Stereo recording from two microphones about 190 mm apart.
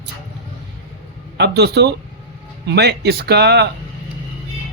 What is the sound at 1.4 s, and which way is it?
Speech, 60° right (ahead or behind).